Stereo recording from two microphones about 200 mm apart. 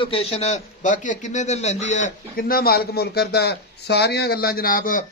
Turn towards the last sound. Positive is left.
turn(degrees=45)  # may be behind; listen again after turning